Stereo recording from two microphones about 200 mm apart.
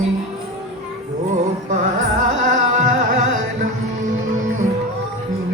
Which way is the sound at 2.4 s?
40° right (ahead or behind).